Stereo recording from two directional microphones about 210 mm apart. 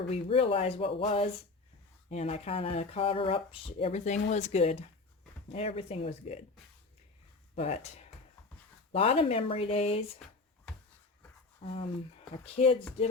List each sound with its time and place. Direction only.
0.1 s speech: 25° left (ahead or behind)
7.5 s speech: 30° left (ahead or behind)
10.2 s a sound: 5° left (ahead or behind)
11.6 s speech: 30° left (ahead or behind)